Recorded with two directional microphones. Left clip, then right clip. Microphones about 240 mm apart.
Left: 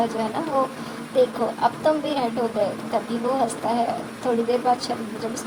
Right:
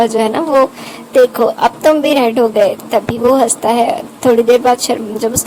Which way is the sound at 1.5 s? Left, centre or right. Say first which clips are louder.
Right 10 dB; right.